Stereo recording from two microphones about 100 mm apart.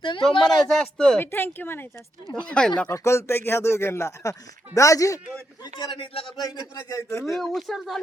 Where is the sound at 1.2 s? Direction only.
20° left (ahead or behind).